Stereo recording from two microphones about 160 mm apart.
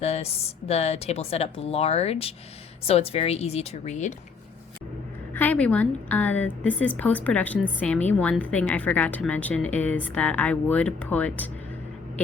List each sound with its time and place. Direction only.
0.0 s speech: 40° left (ahead or behind)
5.3 s a woman's voice: 10° left (ahead or behind)